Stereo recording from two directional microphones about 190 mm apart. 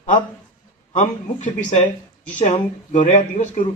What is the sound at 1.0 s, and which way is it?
Speech, 40° left (ahead or behind).